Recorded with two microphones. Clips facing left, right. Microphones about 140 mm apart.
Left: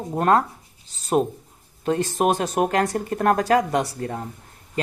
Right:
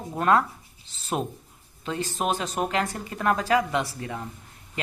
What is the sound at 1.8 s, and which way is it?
A man's voice, 50° left (ahead or behind).